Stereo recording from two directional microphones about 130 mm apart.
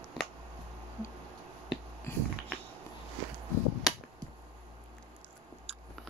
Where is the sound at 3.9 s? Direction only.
Centre (ahead or behind).